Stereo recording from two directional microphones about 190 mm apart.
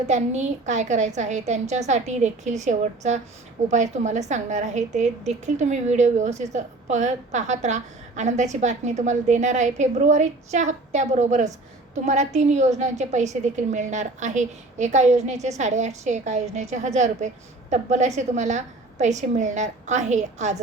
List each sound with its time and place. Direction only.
0.1 s a woman's voice: 40° right (ahead or behind)